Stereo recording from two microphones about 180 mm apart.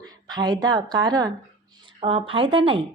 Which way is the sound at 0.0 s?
20° right (ahead or behind).